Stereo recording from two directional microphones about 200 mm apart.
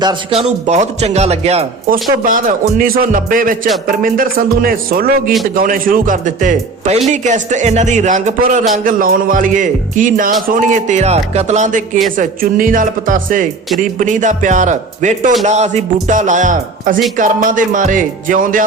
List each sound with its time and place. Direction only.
0.0 s speech: 25° right (ahead or behind); by 18.6 s 40° right (ahead or behind)